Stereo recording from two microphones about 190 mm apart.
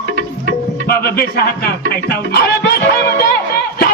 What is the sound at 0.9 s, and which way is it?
Speech, 55° left (ahead or behind).